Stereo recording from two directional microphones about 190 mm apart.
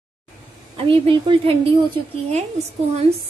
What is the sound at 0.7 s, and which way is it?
Speech, 30° right (ahead or behind).